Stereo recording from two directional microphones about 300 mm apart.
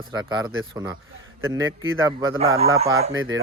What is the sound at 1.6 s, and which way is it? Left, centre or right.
Speech, right.